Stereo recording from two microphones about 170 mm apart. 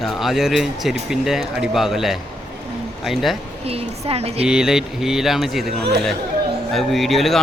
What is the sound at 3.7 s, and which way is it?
Speech, 35° right (ahead or behind).